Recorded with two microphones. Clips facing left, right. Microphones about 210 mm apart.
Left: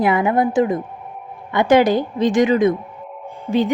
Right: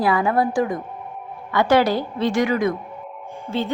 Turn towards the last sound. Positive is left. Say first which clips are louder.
# left 6 dB
turn(degrees=15)  # may be behind; listen again after turning